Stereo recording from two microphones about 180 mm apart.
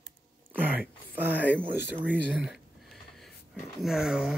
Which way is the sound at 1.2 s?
10° right (ahead or behind).